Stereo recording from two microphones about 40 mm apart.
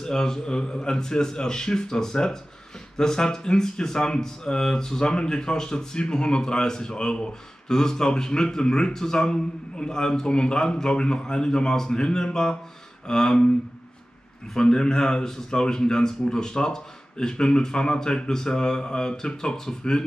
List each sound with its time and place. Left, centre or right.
0.0 s speech: centre
14.5 s a man's voice: centre